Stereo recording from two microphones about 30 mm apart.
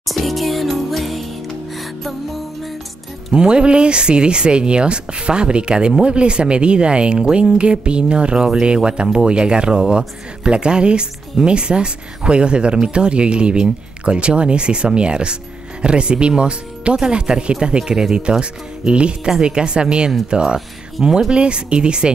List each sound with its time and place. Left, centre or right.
0.1 s music: centre
3.3 s speech: right
18.4 s speech: right
19.2 s speech: right